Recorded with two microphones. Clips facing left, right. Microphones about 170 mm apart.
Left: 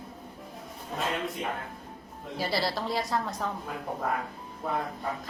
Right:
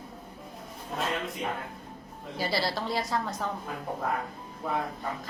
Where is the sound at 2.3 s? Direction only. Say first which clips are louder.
Even; centre (ahead or behind).